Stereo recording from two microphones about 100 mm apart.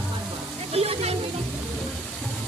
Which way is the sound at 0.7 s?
90° right.